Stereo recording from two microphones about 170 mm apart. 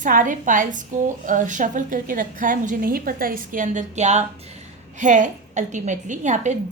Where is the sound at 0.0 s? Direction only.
50° right (ahead or behind).